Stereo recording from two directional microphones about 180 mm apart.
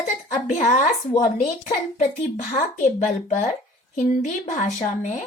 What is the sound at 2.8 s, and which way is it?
Speech, 45° left (ahead or behind).